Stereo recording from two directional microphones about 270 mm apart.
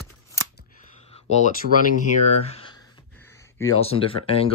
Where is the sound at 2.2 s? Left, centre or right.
Left.